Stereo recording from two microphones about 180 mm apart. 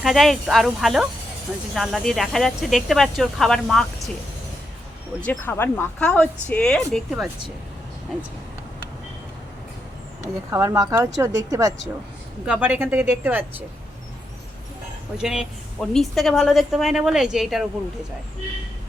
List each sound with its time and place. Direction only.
0.0 s a woman's voice: centre (ahead or behind)
5.2 s speech: 10° left (ahead or behind)
10.5 s speech: 15° right (ahead or behind)
12.5 s speech: 5° right (ahead or behind)
15.2 s a woman's voice: 5° right (ahead or behind)